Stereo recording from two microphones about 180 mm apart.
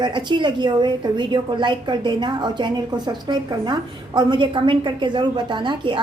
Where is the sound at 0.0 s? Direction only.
25° right (ahead or behind).